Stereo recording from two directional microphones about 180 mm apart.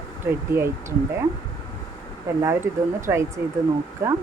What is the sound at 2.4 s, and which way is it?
Speech, 15° right (ahead or behind).